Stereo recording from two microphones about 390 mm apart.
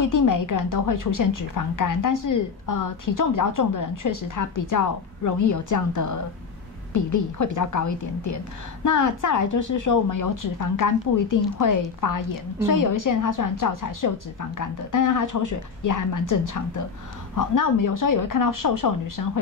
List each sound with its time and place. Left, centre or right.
0.0 s a woman's voice: left